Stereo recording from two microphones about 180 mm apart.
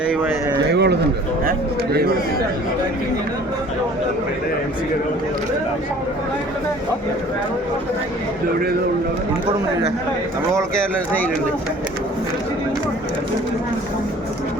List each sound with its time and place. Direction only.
0.7 s a man's voice: 70° right (ahead or behind)
1.5 s a man's voice: 60° right (ahead or behind)